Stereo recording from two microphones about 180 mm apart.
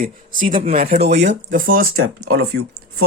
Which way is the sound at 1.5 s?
50° right (ahead or behind).